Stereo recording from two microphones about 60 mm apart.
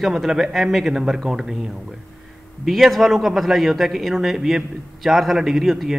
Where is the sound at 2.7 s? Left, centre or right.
Centre.